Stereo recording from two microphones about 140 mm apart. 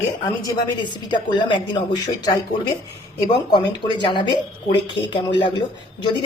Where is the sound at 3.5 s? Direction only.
35° left (ahead or behind).